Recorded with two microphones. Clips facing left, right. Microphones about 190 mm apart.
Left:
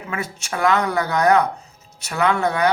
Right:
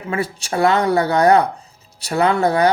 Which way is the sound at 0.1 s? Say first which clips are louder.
Right 6 dB; 35° right (ahead or behind).